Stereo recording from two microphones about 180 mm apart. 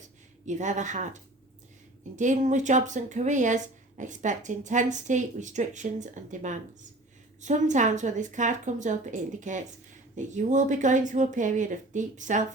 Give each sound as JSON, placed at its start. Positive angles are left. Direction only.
{"t": 0.4, "sound": "speech", "side_deg": -40}